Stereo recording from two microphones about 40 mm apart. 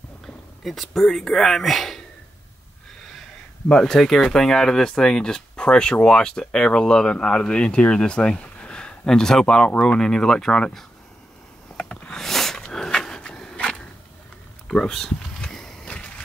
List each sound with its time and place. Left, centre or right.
0.7 s speech: centre
3.6 s speech: centre
11.7 s a sound: centre
14.7 s speech: centre